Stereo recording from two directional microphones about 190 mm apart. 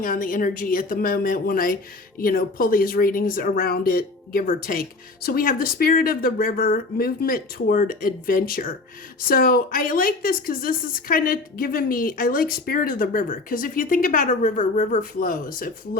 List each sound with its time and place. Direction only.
0.0 s speech: 45° left (ahead or behind)